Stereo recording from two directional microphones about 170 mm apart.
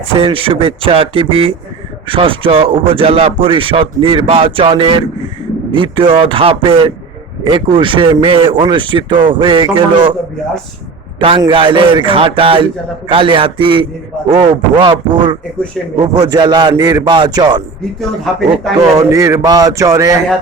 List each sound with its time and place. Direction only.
0.1 s a man's voice: 30° right (ahead or behind)
11.2 s a man's voice: 30° right (ahead or behind)
18.0 s speech: centre (ahead or behind)
18.9 s a man's voice: 20° right (ahead or behind)